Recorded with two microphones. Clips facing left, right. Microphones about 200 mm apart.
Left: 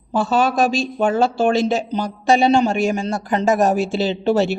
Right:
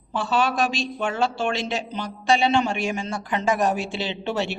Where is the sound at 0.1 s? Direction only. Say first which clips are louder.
Left 5 dB; 40° left (ahead or behind).